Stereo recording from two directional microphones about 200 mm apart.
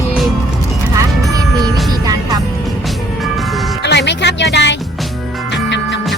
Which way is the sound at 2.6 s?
Centre (ahead or behind).